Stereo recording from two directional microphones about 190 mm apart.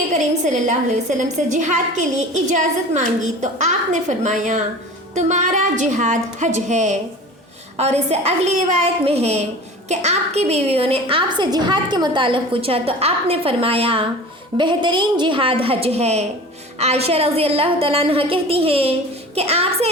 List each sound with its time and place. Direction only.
0.1 s a woman's voice: 40° right (ahead or behind)